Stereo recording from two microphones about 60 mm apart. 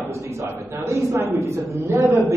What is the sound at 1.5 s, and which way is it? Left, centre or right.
Speech, right.